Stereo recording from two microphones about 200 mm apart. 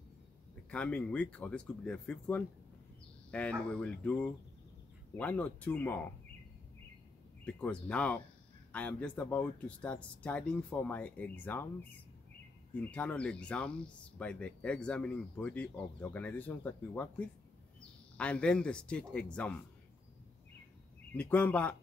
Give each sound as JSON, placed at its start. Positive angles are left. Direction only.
{"t": 0.7, "sound": "speech", "side_deg": 5}
{"t": 7.9, "sound": "speech", "side_deg": 5}
{"t": 12.7, "sound": "speech", "side_deg": 5}
{"t": 21.1, "sound": "speech", "side_deg": 10}